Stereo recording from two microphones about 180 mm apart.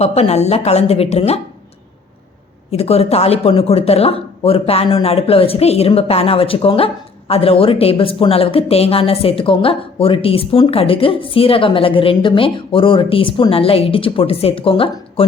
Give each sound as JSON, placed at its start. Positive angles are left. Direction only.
{"t": 0.0, "sound": "speech", "side_deg": 35}
{"t": 2.7, "sound": "speech", "side_deg": 35}